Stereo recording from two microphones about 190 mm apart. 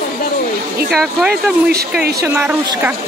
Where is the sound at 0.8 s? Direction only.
5° right (ahead or behind).